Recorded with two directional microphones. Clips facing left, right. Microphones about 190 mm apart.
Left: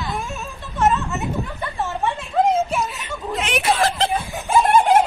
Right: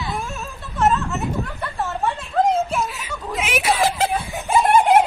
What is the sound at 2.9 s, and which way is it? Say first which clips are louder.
Snicker: left 1 dB; centre (ahead or behind).